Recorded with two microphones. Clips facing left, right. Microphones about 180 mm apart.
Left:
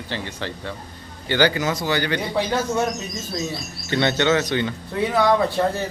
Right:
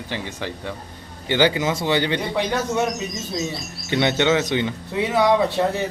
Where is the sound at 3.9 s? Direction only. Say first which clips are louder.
Even; 15° right (ahead or behind).